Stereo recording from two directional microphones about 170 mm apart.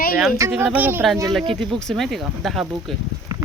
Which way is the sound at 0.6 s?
10° right (ahead or behind).